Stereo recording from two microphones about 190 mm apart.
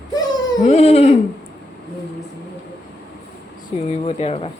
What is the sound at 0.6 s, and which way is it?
Speech, 35° left (ahead or behind).